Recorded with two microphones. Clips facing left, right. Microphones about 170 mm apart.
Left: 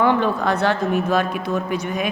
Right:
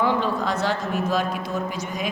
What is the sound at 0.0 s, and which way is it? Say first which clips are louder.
A woman's voice: left 4 dB; 60° left (ahead or behind).